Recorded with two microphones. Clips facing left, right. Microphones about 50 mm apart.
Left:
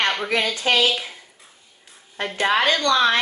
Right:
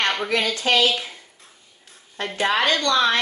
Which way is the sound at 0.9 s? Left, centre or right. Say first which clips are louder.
Even; centre.